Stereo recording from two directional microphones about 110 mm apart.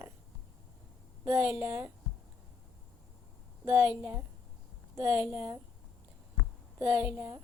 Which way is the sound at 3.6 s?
25° right (ahead or behind).